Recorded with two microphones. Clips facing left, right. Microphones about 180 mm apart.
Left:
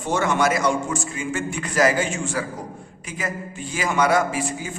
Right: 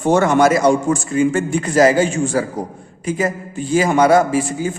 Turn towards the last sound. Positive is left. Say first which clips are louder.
# right 7 dB
turn(degrees=-35)  # may be behind; listen again after turning